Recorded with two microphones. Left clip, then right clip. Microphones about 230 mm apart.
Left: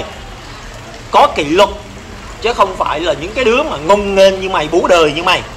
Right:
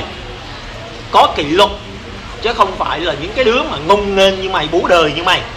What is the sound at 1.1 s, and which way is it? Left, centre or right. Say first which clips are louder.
A man's voice: left 1 dB; left.